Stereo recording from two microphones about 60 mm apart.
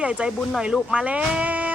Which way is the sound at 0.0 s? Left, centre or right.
Right.